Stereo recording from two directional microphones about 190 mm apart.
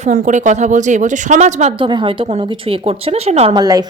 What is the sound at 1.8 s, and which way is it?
A woman's voice, 25° right (ahead or behind).